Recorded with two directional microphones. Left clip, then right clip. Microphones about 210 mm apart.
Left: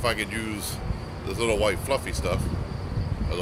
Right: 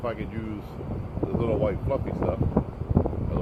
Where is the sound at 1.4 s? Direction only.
15° left (ahead or behind).